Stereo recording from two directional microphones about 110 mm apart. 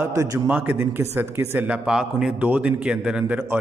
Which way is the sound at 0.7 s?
25° right (ahead or behind).